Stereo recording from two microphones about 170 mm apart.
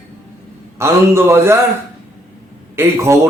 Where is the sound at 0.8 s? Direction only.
15° right (ahead or behind).